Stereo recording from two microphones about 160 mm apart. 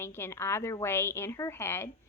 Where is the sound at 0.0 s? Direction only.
15° left (ahead or behind).